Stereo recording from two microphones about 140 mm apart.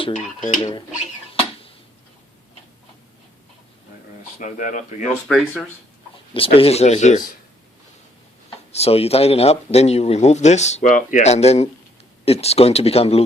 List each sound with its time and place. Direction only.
0.1 s speech: 55° left (ahead or behind)
4.4 s speech: 65° left (ahead or behind)
5.3 s speech: centre (ahead or behind)
6.3 s speech: 40° left (ahead or behind)
8.7 s speech: 45° left (ahead or behind)